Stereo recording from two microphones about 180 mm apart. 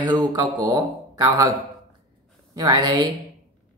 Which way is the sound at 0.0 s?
25° right (ahead or behind).